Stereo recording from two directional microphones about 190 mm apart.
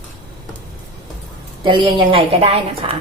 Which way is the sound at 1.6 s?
25° right (ahead or behind).